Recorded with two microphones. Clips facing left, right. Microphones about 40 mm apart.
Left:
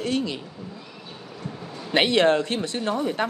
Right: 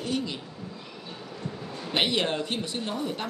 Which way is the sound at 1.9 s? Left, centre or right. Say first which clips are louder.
Left 7 dB; left.